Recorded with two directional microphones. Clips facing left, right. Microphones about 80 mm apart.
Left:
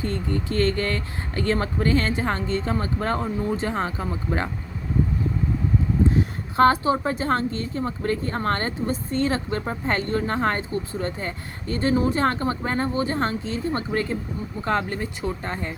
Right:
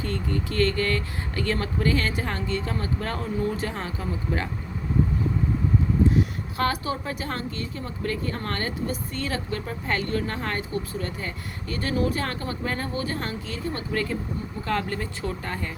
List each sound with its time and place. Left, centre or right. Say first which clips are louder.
0.0 s speech: left 2 dB; left
6.6 s speech: left 9 dB; left